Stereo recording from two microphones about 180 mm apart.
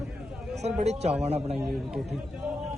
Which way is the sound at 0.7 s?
35° right (ahead or behind).